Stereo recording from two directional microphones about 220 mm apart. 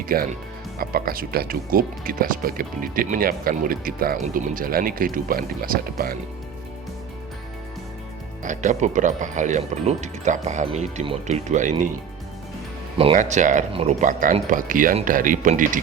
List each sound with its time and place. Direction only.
0.1 s speech: 40° right (ahead or behind)
8.4 s speech: 35° right (ahead or behind)
13.0 s speech: 30° right (ahead or behind)